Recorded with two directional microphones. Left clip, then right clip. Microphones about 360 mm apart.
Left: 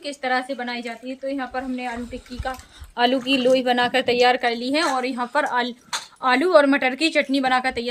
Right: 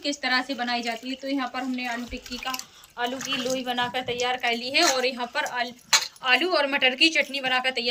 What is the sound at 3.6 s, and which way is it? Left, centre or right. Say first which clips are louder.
A woman's voice: left 8 dB; left.